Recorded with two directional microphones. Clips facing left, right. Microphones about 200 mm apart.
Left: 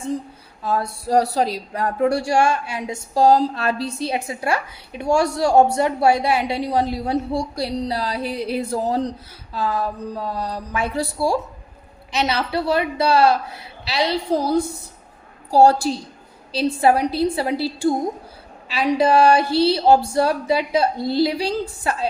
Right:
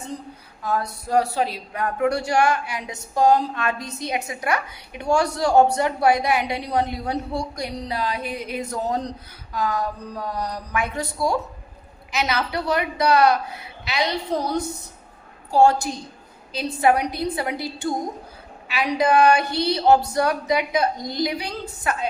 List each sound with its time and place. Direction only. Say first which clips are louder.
0.6 s a woman's voice: left 2 dB; 30° left (ahead or behind)